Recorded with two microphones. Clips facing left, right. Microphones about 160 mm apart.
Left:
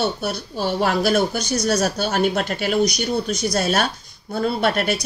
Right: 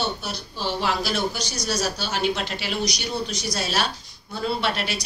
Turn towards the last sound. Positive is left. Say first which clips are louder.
# left 6 dB
turn(degrees=50)  # may be behind; listen again after turning